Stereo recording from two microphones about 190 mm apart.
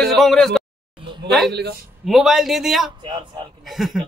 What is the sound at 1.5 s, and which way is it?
Speech, 60° right (ahead or behind).